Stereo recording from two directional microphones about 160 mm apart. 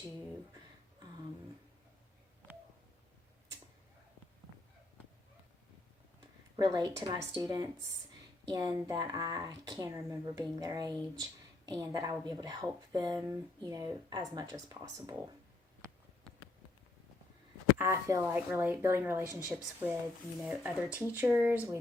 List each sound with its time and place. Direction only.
6.6 s speech: 25° right (ahead or behind)
17.7 s speech: 15° right (ahead or behind)